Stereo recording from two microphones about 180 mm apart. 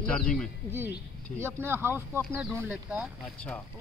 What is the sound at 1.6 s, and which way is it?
Speech, 10° right (ahead or behind).